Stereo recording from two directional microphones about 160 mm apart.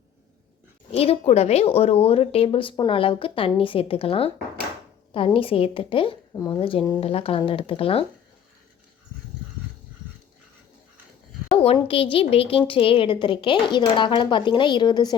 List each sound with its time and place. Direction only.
0.9 s speech: 40° left (ahead or behind)
11.4 s a sound: 40° left (ahead or behind)
11.9 s speech: 35° left (ahead or behind)